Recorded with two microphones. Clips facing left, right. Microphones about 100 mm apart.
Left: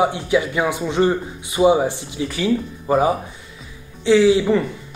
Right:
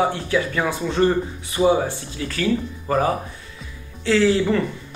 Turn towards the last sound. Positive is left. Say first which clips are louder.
# left 4 dB
turn(degrees=10)  # may be behind; listen again after turning